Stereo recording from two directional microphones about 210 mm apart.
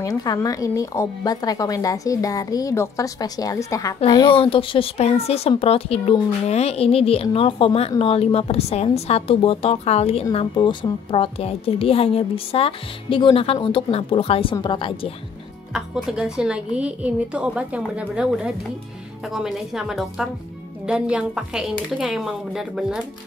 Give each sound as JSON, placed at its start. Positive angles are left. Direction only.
{"t": 0.0, "sound": "a woman's voice", "side_deg": 15}
{"t": 15.7, "sound": "a woman's voice", "side_deg": -5}